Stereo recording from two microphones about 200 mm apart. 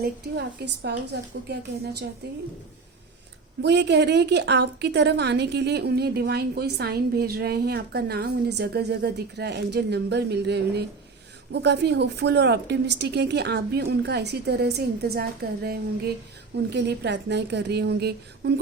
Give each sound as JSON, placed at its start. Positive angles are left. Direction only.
{"t": 0.0, "sound": "a woman's voice", "side_deg": -55}
{"t": 3.6, "sound": "a woman's voice", "side_deg": -55}